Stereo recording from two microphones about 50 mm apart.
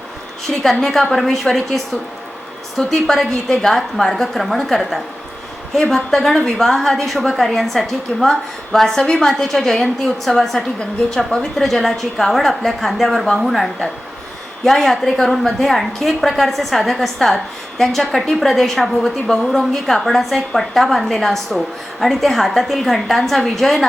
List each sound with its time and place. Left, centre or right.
0.6 s a woman's voice: centre